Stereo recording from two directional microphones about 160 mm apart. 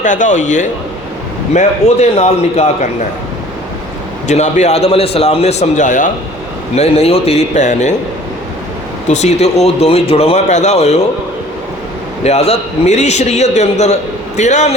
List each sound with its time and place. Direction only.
0.0 s a man's voice: 50° left (ahead or behind)
4.3 s a man's voice: 45° left (ahead or behind)
6.7 s a man's voice: 40° left (ahead or behind)
9.0 s speech: 45° left (ahead or behind)
12.2 s a man's voice: 40° left (ahead or behind)